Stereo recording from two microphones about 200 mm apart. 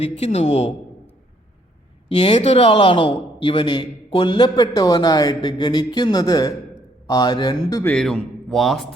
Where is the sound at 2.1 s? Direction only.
30° left (ahead or behind).